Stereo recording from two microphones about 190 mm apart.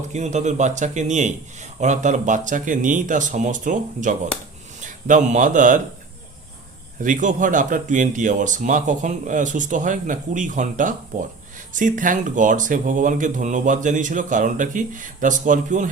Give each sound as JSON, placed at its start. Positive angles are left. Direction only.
{"t": 0.1, "sound": "speech", "side_deg": -40}
{"t": 7.0, "sound": "speech", "side_deg": -40}